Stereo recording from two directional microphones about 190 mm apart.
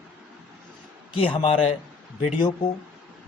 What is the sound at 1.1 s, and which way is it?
Speech, 30° left (ahead or behind).